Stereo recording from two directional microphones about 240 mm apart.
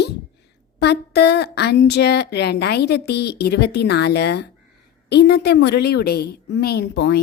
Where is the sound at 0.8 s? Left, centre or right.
Left.